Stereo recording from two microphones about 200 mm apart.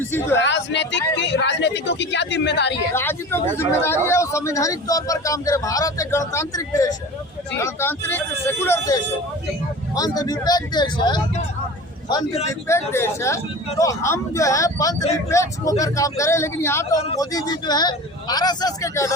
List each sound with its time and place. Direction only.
0.0 s a man's voice: 10° left (ahead or behind)
0.3 s speech: 60° left (ahead or behind)
2.9 s a man's voice: 10° left (ahead or behind); by 12.5 s 25° left (ahead or behind)
12.9 s a man's voice: 15° left (ahead or behind)